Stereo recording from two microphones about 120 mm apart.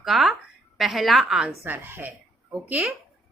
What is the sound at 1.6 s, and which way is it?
A woman's voice, 15° right (ahead or behind).